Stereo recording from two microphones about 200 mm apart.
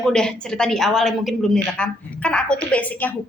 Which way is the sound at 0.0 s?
5° left (ahead or behind).